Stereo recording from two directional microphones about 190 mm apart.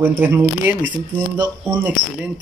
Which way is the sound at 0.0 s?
10° right (ahead or behind).